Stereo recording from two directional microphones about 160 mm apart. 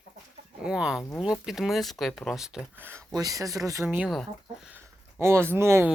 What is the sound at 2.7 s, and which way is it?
Speech, 15° right (ahead or behind).